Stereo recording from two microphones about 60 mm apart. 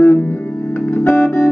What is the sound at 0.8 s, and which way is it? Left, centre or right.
Organ, left.